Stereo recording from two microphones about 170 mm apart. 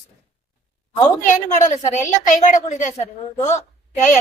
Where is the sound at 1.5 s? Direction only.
45° left (ahead or behind).